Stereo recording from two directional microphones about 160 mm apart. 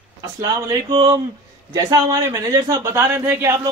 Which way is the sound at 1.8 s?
20° right (ahead or behind).